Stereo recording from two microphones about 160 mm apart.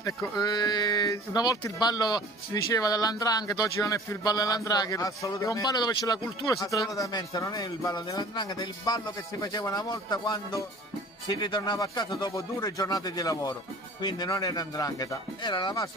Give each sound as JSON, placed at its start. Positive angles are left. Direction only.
{"t": 0.0, "sound": "speech", "side_deg": 25}